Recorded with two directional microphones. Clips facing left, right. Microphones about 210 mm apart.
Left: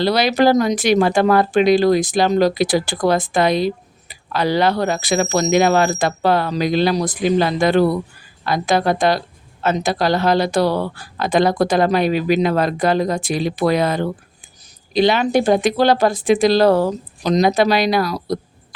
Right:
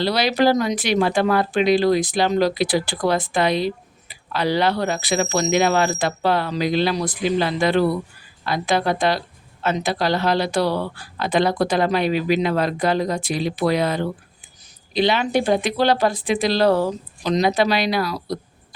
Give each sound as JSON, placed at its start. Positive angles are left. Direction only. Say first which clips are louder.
{"t": 0.0, "sound": "speech", "louder": "left 3 dB", "side_deg": 45}